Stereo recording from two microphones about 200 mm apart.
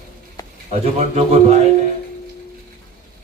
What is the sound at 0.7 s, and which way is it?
Speech, 30° right (ahead or behind).